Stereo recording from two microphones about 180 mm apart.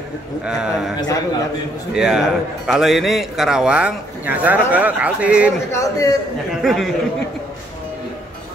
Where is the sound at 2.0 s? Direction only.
5° right (ahead or behind).